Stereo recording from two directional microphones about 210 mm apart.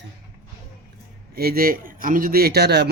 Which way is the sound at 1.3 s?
45° right (ahead or behind).